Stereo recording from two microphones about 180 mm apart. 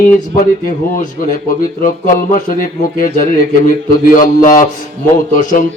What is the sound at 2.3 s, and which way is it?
Speech, 50° left (ahead or behind).